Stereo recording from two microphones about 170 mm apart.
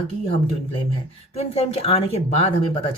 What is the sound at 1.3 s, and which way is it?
Speech, 35° left (ahead or behind).